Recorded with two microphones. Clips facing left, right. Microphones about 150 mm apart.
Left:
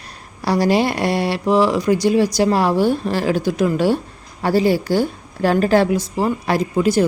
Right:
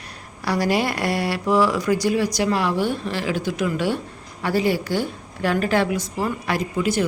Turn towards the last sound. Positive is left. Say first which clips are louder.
# left 6 dB
turn(degrees=40)  # may be behind; listen again after turning